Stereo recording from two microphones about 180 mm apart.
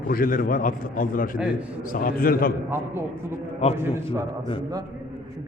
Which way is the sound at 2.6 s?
15° right (ahead or behind).